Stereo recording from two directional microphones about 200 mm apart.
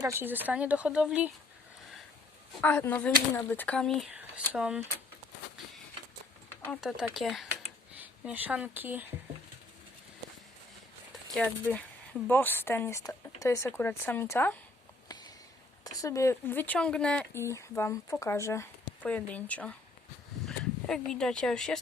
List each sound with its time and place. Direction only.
0.0 s speech: 10° right (ahead or behind)
2.6 s speech: 10° left (ahead or behind)
6.7 s speech: 5° right (ahead or behind)
11.3 s speech: 10° left (ahead or behind)
15.0 s a sound: 20° left (ahead or behind)
15.8 s speech: 20° left (ahead or behind)